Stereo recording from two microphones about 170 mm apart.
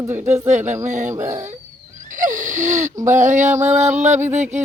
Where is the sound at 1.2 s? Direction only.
45° right (ahead or behind).